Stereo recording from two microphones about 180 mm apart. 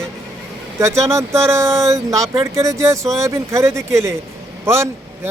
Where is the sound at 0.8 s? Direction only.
15° right (ahead or behind).